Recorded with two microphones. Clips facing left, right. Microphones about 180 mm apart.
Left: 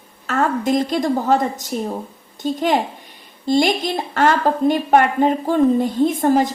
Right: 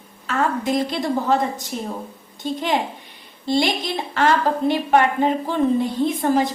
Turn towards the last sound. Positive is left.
turn(degrees=45)  # may be behind; listen again after turning